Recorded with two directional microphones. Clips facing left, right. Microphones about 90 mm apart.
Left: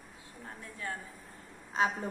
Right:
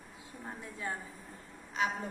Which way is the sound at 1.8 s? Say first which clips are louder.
Left 3 dB; 35° left (ahead or behind).